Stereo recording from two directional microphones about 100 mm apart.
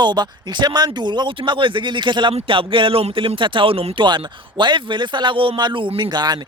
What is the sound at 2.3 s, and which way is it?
Speech, 65° right (ahead or behind).